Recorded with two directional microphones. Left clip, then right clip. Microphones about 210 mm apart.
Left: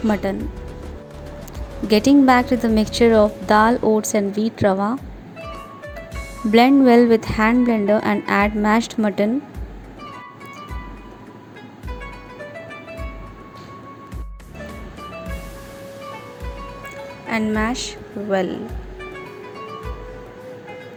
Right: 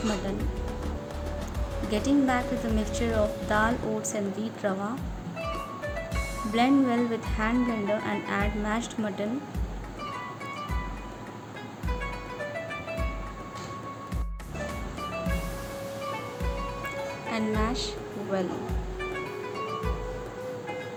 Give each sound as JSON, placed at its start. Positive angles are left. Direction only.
{"t": 0.2, "sound": "a woman's voice", "side_deg": 35}
{"t": 1.9, "sound": "a woman's voice", "side_deg": 40}
{"t": 5.4, "sound": "music", "side_deg": 0}
{"t": 6.6, "sound": "a woman's voice", "side_deg": 40}
{"t": 12.4, "sound": "music", "side_deg": 0}
{"t": 14.6, "sound": "music", "side_deg": 0}
{"t": 17.6, "sound": "speech", "side_deg": 30}
{"t": 19.0, "sound": "music", "side_deg": 0}